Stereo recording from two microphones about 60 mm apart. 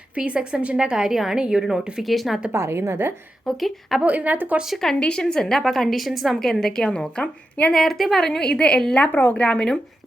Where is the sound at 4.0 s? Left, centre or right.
Right.